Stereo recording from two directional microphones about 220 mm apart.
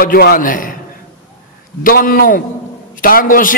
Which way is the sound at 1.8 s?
40° left (ahead or behind).